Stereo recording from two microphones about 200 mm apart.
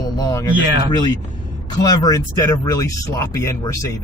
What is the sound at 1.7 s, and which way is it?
Speech, 20° left (ahead or behind).